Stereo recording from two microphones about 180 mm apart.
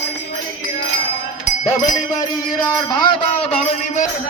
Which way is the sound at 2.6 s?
25° left (ahead or behind).